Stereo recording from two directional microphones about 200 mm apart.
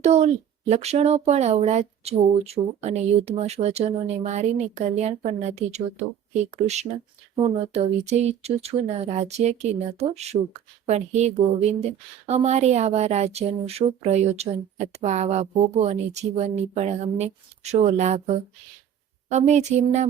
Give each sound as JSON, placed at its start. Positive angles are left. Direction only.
{"t": 0.0, "sound": "a woman's voice", "side_deg": -35}